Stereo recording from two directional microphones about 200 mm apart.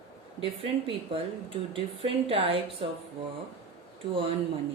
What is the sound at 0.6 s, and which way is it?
A woman's voice, 25° right (ahead or behind).